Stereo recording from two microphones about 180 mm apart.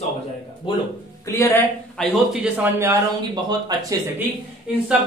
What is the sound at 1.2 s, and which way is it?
Speech, 15° left (ahead or behind).